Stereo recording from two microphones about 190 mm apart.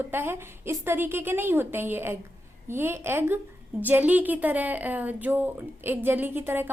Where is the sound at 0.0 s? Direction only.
10° right (ahead or behind).